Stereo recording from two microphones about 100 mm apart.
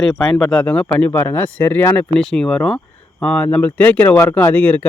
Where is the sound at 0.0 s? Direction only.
10° left (ahead or behind).